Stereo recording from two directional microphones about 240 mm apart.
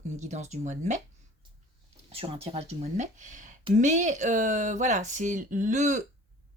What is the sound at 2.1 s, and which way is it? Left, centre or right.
Speech, right.